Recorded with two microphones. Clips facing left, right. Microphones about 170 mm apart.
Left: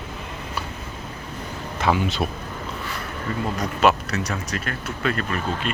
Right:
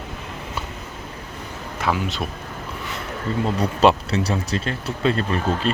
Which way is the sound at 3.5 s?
30° right (ahead or behind).